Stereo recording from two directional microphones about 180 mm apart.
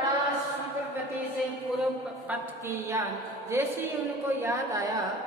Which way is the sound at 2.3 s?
15° right (ahead or behind).